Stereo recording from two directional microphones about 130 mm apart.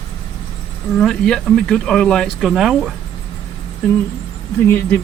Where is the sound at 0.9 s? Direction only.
5° left (ahead or behind).